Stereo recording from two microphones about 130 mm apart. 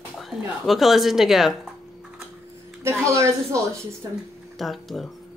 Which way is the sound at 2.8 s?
20° right (ahead or behind).